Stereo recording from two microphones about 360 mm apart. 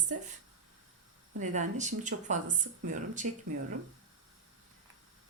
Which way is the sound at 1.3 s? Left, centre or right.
Right.